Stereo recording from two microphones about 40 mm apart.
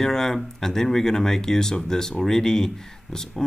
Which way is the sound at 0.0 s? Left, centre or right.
Centre.